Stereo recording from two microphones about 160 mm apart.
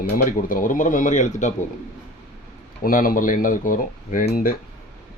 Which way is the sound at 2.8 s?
65° left (ahead or behind).